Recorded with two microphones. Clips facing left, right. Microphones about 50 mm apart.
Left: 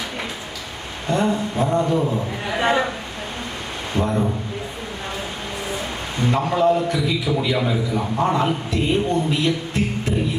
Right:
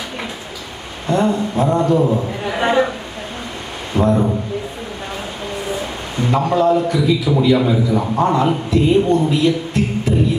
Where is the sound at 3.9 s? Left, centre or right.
Centre.